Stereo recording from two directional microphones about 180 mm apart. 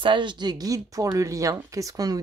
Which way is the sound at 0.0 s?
25° right (ahead or behind).